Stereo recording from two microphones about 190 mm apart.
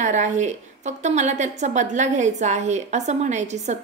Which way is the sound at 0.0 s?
40° right (ahead or behind).